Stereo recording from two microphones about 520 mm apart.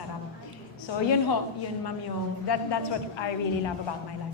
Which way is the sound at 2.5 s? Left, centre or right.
Left.